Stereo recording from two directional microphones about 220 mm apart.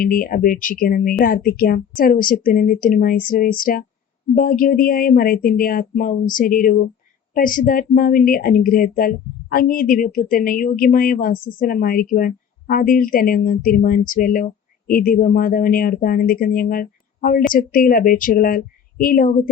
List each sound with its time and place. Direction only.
0.0 s speech: 40° left (ahead or behind)